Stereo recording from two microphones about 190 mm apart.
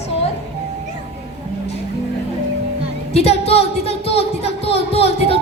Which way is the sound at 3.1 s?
30° left (ahead or behind).